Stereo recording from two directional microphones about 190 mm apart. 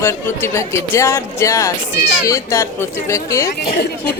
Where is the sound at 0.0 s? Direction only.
15° left (ahead or behind).